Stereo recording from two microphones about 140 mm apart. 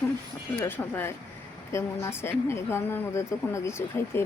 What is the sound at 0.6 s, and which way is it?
A woman's voice, 15° left (ahead or behind).